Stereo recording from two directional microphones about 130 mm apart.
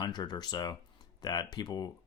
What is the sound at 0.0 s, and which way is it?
Speech, 30° left (ahead or behind).